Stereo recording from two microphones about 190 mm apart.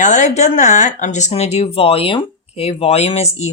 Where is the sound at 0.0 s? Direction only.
40° left (ahead or behind).